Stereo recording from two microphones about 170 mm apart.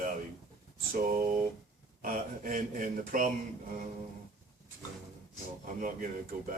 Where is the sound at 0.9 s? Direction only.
50° right (ahead or behind).